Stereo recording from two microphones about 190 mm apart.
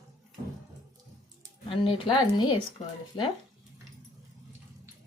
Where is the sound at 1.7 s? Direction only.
30° left (ahead or behind).